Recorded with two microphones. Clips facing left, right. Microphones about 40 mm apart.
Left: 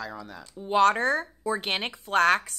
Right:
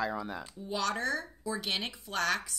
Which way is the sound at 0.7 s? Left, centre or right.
Left.